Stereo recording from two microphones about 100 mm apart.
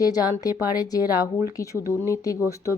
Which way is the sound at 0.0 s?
40° left (ahead or behind).